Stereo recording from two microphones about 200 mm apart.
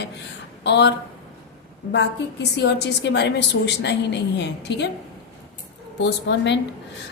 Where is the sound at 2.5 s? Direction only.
60° left (ahead or behind).